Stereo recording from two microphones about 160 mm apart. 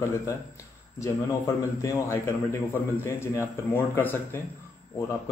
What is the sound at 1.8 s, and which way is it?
A man's voice, 15° left (ahead or behind).